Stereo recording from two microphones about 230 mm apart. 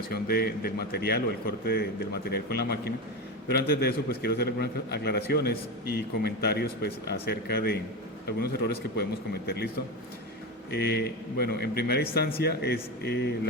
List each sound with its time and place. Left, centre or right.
0.1 s a man's voice: left